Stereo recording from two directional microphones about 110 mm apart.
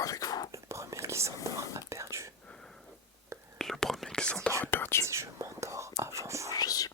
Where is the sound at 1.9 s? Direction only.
25° right (ahead or behind).